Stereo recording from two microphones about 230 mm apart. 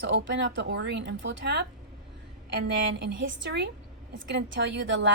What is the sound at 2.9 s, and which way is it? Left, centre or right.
A woman's voice, right.